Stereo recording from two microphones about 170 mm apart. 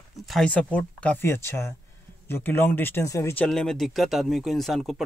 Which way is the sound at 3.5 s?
Centre (ahead or behind).